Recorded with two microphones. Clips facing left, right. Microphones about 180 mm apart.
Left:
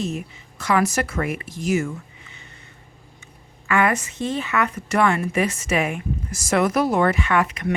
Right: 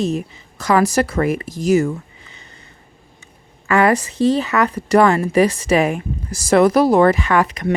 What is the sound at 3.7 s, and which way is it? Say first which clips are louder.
Speech: right 6 dB; 35° right (ahead or behind).